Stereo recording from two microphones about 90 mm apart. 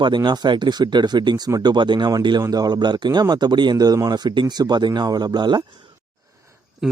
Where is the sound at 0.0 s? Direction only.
55° right (ahead or behind).